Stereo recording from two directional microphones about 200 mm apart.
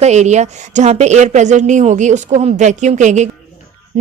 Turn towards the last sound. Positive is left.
turn(degrees=-35)  # may be behind; listen again after turning